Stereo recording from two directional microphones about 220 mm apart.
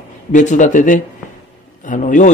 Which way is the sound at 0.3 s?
35° left (ahead or behind).